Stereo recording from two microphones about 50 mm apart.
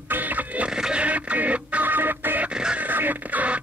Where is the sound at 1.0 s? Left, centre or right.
Right.